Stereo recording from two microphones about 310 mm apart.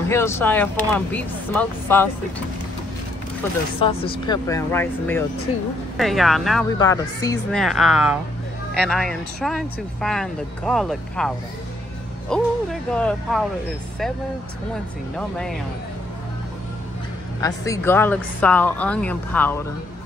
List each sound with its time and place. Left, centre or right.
0.1 s speech: centre
3.8 s speech: centre
6.8 s speech: centre
7.6 s speech: centre
15.1 s speech: centre
17.4 s speech: centre